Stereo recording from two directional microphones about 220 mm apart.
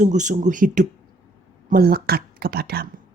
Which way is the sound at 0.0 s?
35° right (ahead or behind).